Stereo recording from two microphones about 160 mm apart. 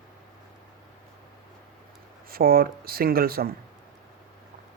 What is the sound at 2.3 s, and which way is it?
Speech, 70° right (ahead or behind).